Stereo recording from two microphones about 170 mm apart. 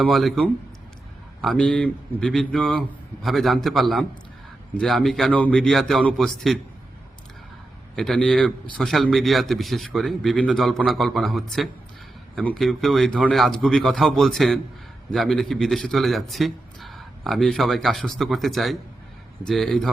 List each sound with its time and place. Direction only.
0.0 s a man's voice: centre (ahead or behind)
7.9 s a man's voice: centre (ahead or behind)